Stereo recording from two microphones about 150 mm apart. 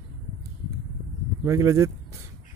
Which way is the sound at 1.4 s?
20° right (ahead or behind).